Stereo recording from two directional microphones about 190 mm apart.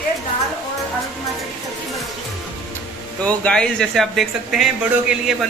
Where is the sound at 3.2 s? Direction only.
5° left (ahead or behind).